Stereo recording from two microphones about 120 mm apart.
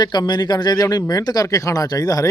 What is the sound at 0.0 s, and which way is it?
Speech, 35° left (ahead or behind).